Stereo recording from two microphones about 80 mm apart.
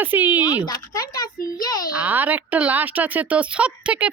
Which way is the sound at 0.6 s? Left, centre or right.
Left.